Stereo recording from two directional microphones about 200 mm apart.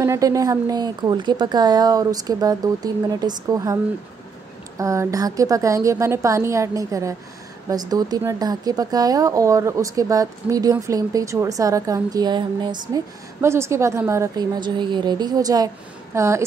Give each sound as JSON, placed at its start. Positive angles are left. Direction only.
{"t": 0.0, "sound": "a woman's voice", "side_deg": -15}